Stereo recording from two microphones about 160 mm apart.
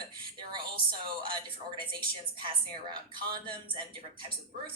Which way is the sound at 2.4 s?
30° right (ahead or behind).